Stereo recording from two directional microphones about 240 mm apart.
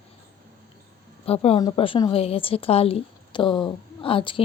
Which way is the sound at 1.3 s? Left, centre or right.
Left.